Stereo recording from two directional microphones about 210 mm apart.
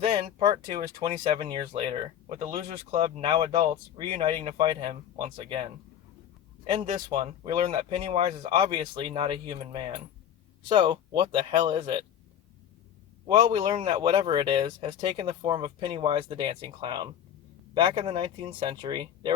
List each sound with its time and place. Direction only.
0.0 s speech: 25° right (ahead or behind)
6.8 s speech: 35° right (ahead or behind)
7.7 s speech: 25° right (ahead or behind)
13.2 s speech: 20° right (ahead or behind)